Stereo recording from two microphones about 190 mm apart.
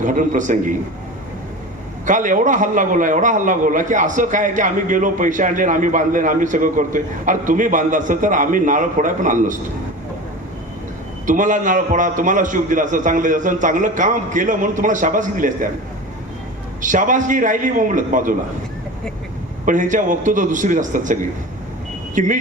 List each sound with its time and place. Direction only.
0.0 s a man's voice: 45° right (ahead or behind)
2.0 s a man's voice: 45° right (ahead or behind)
11.3 s a man's voice: 40° right (ahead or behind)
16.8 s a man's voice: 40° right (ahead or behind)
19.6 s a man's voice: 45° right (ahead or behind)